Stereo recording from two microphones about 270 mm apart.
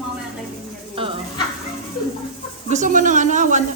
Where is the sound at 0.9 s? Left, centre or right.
Centre.